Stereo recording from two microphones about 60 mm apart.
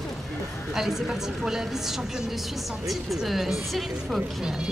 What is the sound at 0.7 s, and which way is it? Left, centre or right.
A woman's voice, centre.